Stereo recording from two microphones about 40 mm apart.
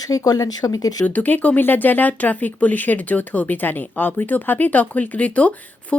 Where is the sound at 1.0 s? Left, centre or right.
Left.